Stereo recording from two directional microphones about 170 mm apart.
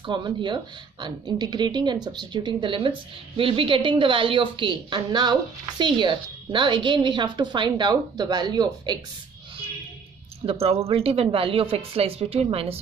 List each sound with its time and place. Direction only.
0.0 s a woman's voice: 25° right (ahead or behind)
10.4 s a woman's voice: 35° right (ahead or behind)